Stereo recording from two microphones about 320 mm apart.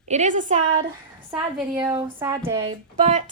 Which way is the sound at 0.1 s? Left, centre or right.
Right.